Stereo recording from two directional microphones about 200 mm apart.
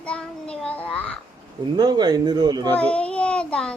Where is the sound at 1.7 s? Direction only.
20° right (ahead or behind).